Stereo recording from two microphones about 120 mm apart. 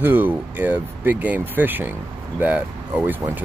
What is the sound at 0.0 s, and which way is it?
Speech, 15° right (ahead or behind).